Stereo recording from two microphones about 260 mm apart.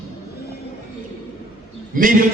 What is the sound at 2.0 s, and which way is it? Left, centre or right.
Speech, right.